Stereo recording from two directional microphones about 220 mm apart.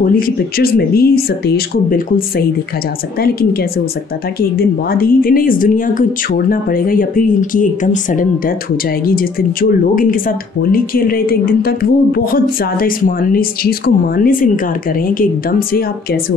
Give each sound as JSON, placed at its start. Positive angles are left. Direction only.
{"t": 0.0, "sound": "speech", "side_deg": 40}